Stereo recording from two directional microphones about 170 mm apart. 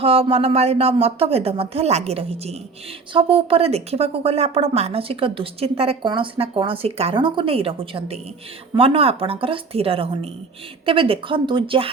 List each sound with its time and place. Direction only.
0.0 s a woman's voice: 35° right (ahead or behind)